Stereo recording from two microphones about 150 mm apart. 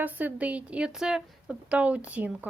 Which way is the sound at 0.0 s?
10° right (ahead or behind).